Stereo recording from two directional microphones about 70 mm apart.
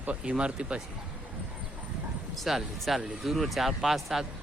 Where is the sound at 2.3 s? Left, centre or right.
Centre.